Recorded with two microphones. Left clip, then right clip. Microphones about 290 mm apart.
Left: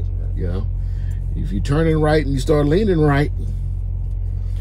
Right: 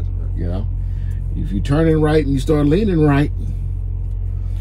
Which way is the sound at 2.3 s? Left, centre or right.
Centre.